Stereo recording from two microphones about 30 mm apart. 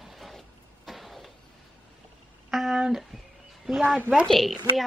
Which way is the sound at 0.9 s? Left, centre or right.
Centre.